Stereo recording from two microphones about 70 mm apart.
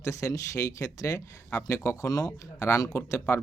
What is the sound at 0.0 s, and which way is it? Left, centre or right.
Speech, left.